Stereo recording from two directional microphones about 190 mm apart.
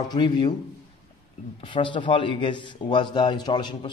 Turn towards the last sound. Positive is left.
turn(degrees=25)  # may be behind; listen again after turning